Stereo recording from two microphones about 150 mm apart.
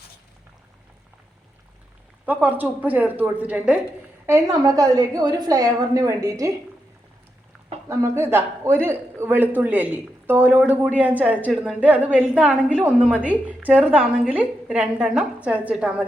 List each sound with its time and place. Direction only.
2.2 s a man's voice: 10° right (ahead or behind)
7.9 s a man's voice: 15° right (ahead or behind)